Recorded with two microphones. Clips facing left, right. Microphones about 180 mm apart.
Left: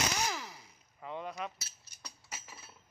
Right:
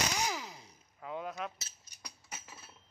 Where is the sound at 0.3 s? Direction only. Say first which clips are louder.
Right 1 dB; 15° right (ahead or behind).